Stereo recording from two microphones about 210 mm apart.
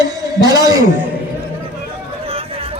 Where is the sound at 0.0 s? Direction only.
15° right (ahead or behind).